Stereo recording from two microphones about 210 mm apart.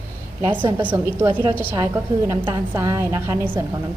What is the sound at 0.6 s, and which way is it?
A woman's voice, 10° right (ahead or behind).